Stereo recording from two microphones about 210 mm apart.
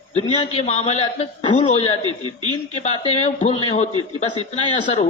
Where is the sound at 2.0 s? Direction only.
20° right (ahead or behind).